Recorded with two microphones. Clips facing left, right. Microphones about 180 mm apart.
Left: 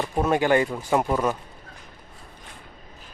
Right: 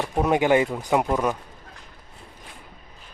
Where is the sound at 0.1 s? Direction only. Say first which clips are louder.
Right 2 dB; 15° right (ahead or behind).